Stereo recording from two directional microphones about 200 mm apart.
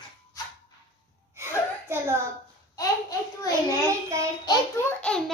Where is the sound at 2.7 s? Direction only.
15° left (ahead or behind).